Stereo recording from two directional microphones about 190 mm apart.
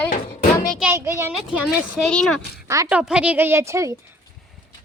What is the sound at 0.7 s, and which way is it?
A woman's voice, 10° right (ahead or behind).